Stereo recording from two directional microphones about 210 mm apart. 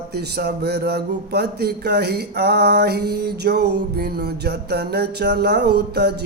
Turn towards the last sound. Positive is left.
turn(degrees=-50)  # may be behind; listen again after turning